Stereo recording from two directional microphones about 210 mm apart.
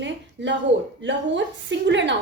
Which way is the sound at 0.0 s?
60° right (ahead or behind).